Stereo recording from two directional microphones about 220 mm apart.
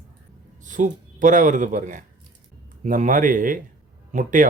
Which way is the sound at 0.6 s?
35° right (ahead or behind).